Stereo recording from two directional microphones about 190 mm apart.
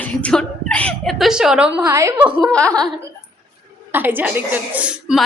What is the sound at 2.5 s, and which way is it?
Speech, 5° left (ahead or behind).